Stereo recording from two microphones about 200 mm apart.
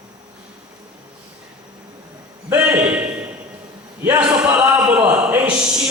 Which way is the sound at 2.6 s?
5° right (ahead or behind).